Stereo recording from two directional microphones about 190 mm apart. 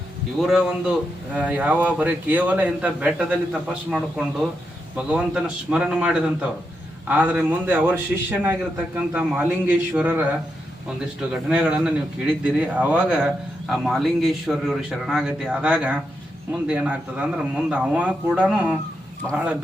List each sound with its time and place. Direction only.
0.3 s a man's voice: 5° right (ahead or behind)